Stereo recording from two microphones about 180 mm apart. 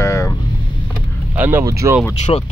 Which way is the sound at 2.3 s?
25° left (ahead or behind).